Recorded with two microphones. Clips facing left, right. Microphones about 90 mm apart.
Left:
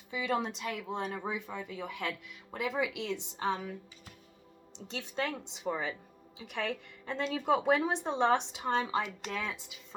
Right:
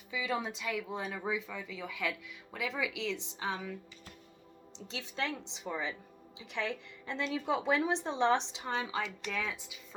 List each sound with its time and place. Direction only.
0.1 s speech: 55° left (ahead or behind)
4.9 s speech: 45° left (ahead or behind)